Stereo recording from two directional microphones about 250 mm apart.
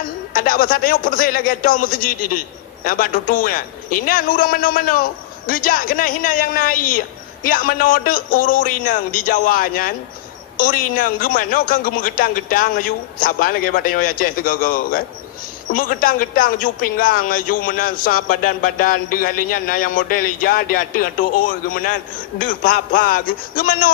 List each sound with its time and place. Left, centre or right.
0.3 s a man's voice: left